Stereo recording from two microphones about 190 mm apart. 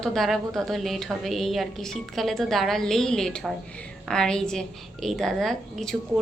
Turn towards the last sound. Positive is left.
turn(degrees=0)  # may be behind; listen again after turning